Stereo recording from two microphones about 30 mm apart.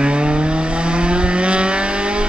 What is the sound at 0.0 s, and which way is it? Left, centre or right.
Vehicle, right.